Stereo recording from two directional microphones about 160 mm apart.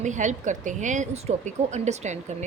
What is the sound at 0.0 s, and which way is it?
Speech, 50° right (ahead or behind).